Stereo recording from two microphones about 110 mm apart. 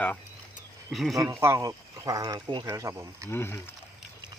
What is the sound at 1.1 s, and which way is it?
Speech, 25° right (ahead or behind).